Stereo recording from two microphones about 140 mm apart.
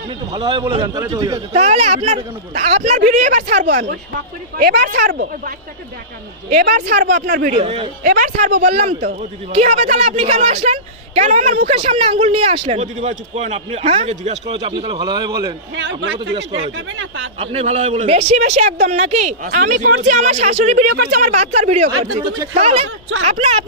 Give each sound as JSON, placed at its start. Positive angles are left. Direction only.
{"t": 0.3, "sound": "speech", "side_deg": -35}
{"t": 0.9, "sound": "a man's voice", "side_deg": -25}
{"t": 1.5, "sound": "a woman's voice", "side_deg": -50}
{"t": 4.6, "sound": "speech", "side_deg": -85}
{"t": 6.5, "sound": "a woman's voice", "side_deg": -80}
{"t": 7.6, "sound": "speech", "side_deg": -40}
{"t": 8.0, "sound": "speech", "side_deg": -70}
{"t": 9.8, "sound": "a man's voice", "side_deg": -50}
{"t": 11.7, "sound": "speech", "side_deg": -40}
{"t": 12.8, "sound": "a man's voice", "side_deg": -60}
{"t": 17.4, "sound": "a man's voice", "side_deg": -45}